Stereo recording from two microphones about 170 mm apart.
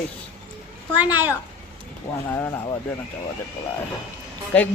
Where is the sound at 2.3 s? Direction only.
15° left (ahead or behind).